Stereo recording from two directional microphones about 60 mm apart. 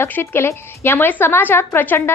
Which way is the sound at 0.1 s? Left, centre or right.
Left.